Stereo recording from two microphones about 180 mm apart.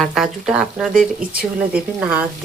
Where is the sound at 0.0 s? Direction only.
Centre (ahead or behind).